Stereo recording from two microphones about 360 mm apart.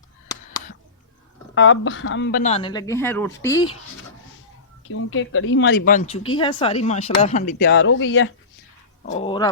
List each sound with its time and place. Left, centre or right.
1.5 s a woman's voice: left; by 3.7 s centre
4.9 s speech: left; by 7.5 s centre
7.6 s speech: left
9.0 s a woman's voice: centre